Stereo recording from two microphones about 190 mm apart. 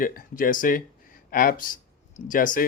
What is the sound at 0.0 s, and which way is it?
Speech, 45° left (ahead or behind).